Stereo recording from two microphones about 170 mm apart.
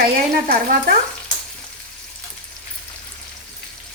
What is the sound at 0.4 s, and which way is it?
Stir, 55° right (ahead or behind).